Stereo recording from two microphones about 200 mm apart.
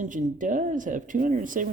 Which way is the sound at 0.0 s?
40° right (ahead or behind).